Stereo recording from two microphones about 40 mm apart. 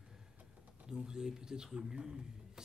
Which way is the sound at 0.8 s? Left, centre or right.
Centre.